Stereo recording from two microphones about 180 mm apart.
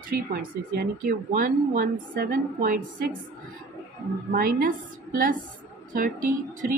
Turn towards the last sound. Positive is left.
turn(degrees=-50)  # may be behind; listen again after turning